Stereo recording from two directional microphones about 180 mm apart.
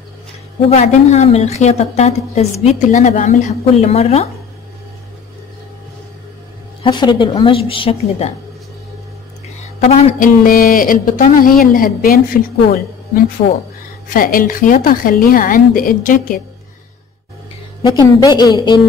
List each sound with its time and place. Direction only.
0.7 s a woman's voice: 35° left (ahead or behind)
6.8 s a woman's voice: 25° left (ahead or behind)
9.8 s a woman's voice: 35° left (ahead or behind)
17.8 s a woman's voice: 20° left (ahead or behind)